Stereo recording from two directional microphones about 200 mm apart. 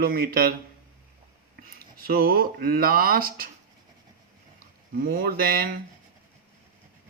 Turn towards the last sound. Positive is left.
turn(degrees=-50)  # may be behind; listen again after turning